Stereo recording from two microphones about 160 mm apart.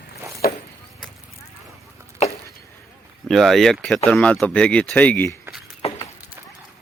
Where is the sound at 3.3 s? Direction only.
Centre (ahead or behind).